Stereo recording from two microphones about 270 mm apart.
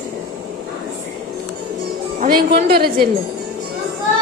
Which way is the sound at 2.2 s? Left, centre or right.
Right.